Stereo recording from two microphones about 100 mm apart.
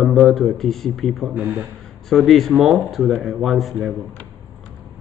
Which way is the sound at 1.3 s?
20° right (ahead or behind).